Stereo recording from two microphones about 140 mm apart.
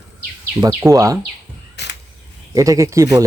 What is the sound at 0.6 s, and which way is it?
Speech, 25° right (ahead or behind).